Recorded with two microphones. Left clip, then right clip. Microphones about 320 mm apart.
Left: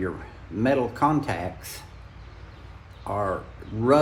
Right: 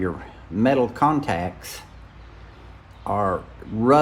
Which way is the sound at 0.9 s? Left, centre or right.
Right.